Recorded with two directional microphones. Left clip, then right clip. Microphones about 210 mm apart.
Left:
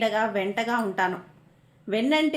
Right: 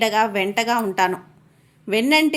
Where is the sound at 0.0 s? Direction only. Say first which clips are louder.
Right 5 dB; 30° right (ahead or behind).